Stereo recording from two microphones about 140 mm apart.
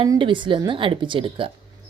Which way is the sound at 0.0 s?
35° right (ahead or behind).